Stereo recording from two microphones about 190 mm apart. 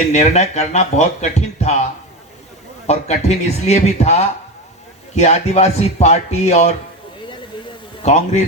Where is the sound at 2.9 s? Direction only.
35° left (ahead or behind).